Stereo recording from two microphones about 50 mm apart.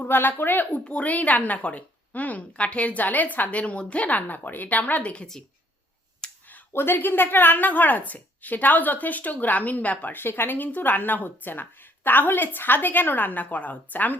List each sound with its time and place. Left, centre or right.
0.0 s a woman's voice: left
6.2 s a sound: centre
6.7 s a woman's voice: left
10.2 s a woman's voice: left